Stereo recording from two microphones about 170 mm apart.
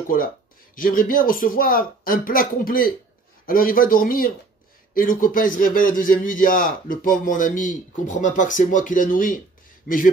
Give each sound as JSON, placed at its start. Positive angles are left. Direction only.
{"t": 0.7, "sound": "a man's voice", "side_deg": 55}